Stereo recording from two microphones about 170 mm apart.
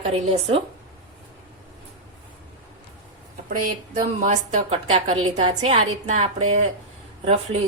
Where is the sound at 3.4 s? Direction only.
55° right (ahead or behind).